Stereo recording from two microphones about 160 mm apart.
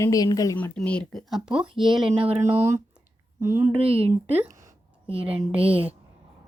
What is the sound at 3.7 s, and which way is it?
Speech, 40° right (ahead or behind).